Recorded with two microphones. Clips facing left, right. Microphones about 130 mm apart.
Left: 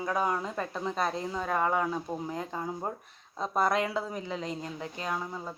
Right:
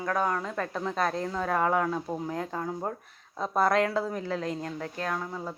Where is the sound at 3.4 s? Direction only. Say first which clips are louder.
Right 3 dB; 5° right (ahead or behind).